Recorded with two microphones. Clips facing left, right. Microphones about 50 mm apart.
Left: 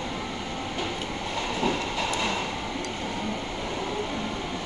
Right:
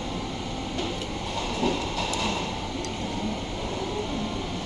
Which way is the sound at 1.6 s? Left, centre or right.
Left.